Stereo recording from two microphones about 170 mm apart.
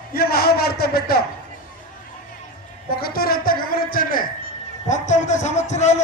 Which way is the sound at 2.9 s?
60° left (ahead or behind).